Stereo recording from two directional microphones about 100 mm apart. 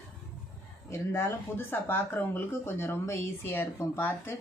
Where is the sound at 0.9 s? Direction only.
25° left (ahead or behind).